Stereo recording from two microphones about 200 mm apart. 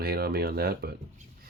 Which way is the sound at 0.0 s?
50° right (ahead or behind).